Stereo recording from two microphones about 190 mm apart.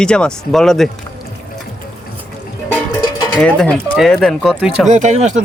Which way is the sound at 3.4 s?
5° left (ahead or behind).